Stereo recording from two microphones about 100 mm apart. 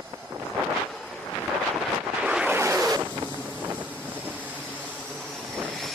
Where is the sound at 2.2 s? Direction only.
15° right (ahead or behind).